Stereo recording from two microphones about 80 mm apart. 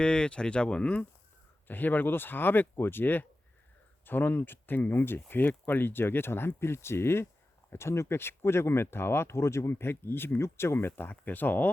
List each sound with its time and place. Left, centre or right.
0.0 s speech: centre